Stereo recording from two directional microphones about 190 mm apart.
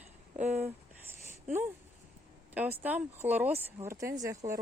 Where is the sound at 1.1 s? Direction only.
10° right (ahead or behind).